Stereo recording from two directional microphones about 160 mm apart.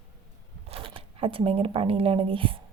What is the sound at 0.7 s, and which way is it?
Speech, 35° right (ahead or behind).